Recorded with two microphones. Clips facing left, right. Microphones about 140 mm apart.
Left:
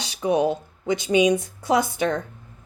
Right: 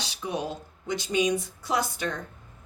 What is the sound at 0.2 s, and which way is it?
Speech, 55° left (ahead or behind).